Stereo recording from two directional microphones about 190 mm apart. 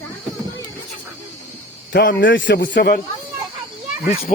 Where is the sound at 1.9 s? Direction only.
60° left (ahead or behind).